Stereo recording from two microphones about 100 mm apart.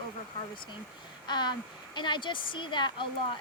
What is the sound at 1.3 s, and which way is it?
Speech, 45° left (ahead or behind).